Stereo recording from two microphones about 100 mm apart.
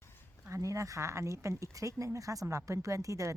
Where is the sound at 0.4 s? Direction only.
30° right (ahead or behind).